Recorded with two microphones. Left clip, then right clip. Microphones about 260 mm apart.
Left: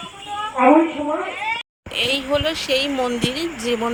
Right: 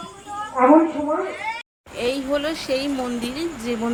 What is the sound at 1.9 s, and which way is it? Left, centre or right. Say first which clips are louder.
Speech: left 3 dB; left.